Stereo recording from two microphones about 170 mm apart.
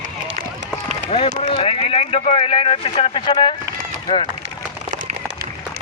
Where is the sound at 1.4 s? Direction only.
35° left (ahead or behind).